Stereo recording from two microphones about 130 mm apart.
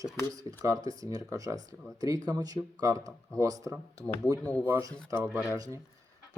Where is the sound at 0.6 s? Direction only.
25° right (ahead or behind).